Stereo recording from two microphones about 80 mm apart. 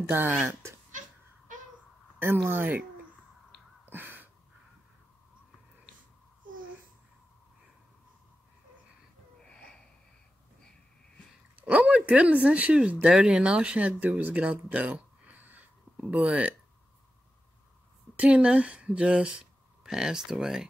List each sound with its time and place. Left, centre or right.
0.0 s speech: right
2.1 s speech: right
3.8 s gasp: right
11.5 s speech: centre
18.1 s speech: centre